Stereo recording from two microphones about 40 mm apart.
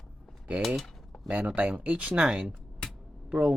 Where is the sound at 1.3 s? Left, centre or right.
Right.